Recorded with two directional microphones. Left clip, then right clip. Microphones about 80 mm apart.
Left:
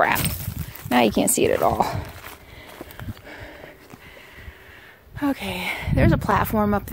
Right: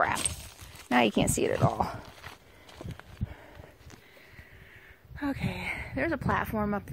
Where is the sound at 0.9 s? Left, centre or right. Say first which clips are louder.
Left 6 dB; centre.